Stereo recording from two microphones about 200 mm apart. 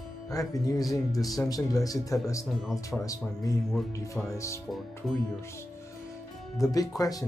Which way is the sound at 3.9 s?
15° left (ahead or behind).